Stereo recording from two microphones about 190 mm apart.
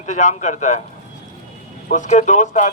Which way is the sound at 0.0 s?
40° left (ahead or behind).